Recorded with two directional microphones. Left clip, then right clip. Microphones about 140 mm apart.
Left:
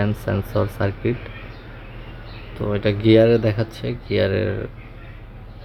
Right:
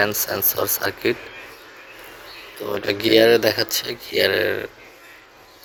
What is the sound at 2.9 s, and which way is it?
Speech, 15° right (ahead or behind).